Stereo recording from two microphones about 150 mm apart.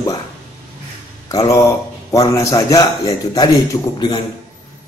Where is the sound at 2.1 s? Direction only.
20° left (ahead or behind).